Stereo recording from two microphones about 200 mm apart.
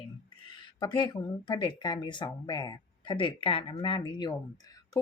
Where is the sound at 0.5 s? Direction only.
25° left (ahead or behind).